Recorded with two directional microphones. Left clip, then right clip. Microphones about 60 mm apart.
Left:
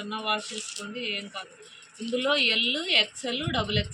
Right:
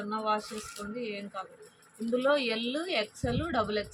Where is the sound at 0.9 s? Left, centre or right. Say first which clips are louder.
Left 5 dB; right.